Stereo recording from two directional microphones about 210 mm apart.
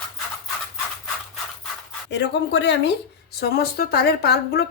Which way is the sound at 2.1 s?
55° left (ahead or behind).